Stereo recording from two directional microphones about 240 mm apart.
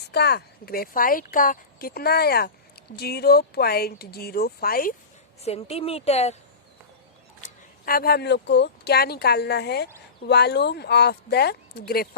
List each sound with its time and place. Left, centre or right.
0.1 s speech: left
5.4 s a woman's voice: left
7.4 s speech: left